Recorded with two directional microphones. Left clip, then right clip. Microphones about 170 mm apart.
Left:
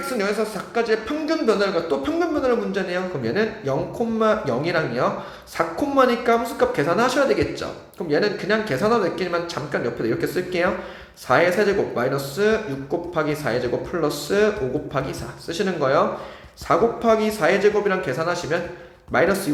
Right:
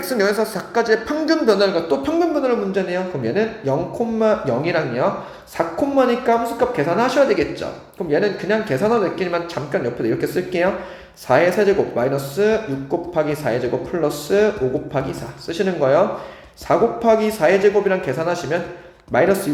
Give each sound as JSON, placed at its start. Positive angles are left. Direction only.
{"t": 0.0, "sound": "speech", "side_deg": -25}